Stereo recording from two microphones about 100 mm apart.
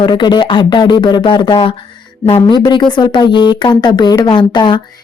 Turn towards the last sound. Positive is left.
turn(degrees=55)  # may be behind; listen again after turning